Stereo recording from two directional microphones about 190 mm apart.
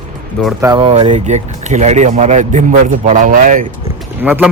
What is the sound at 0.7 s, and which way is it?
Speech, 30° right (ahead or behind).